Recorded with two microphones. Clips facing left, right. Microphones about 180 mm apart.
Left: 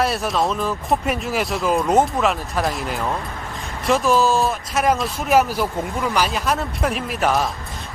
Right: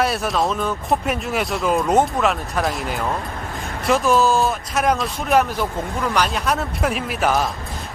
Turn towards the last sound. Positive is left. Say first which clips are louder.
# even
turn(degrees=0)  # may be behind; listen again after turning